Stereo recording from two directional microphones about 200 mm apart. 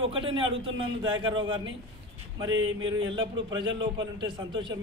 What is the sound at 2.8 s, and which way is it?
A man's voice, 25° right (ahead or behind).